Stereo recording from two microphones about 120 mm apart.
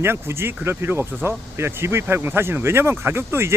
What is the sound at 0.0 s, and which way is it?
Speech, 20° right (ahead or behind).